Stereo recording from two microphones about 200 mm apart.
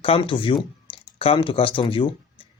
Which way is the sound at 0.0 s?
25° left (ahead or behind).